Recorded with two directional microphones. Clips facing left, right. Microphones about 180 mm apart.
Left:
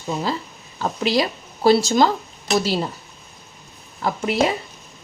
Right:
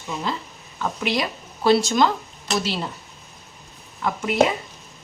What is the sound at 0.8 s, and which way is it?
Speech, 35° left (ahead or behind).